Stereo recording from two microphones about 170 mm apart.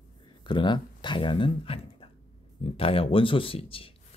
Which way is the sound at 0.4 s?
25° left (ahead or behind).